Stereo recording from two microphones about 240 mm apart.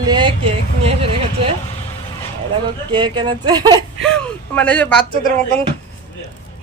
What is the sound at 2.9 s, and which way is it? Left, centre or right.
Speech, centre.